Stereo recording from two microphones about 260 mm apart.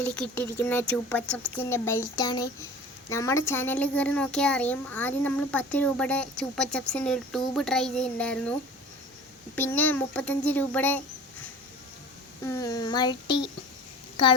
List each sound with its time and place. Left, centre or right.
0.0 s a child's voice: centre
9.6 s speech: centre
12.5 s speech: centre